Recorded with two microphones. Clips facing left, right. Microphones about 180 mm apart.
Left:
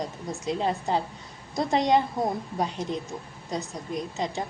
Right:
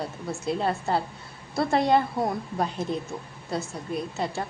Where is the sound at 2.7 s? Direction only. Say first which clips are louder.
Right 2 dB; 10° right (ahead or behind).